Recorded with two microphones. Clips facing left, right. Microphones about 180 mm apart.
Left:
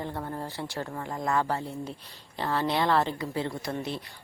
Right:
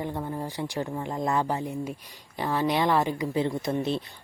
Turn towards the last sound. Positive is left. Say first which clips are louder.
# right 6 dB
turn(degrees=-20)  # may be behind; listen again after turning